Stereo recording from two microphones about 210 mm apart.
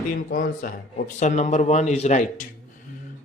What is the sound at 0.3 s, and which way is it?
Speech, 40° left (ahead or behind).